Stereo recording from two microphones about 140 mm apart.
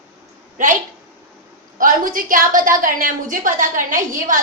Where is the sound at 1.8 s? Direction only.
75° right (ahead or behind).